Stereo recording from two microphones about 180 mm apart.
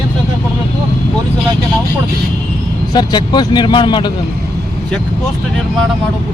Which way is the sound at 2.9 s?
25° left (ahead or behind).